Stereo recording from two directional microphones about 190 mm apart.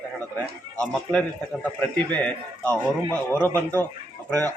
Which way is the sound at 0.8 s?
5° left (ahead or behind).